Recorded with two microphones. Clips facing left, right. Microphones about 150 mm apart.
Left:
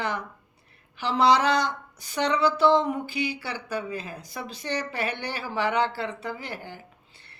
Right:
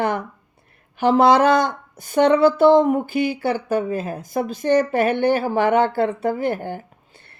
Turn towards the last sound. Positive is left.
turn(degrees=-50)  # may be behind; listen again after turning